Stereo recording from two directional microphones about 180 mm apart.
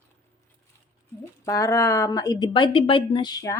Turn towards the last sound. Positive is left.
turn(degrees=20)  # may be behind; listen again after turning